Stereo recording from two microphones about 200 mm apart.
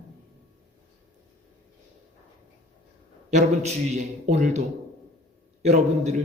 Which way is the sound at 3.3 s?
35° right (ahead or behind).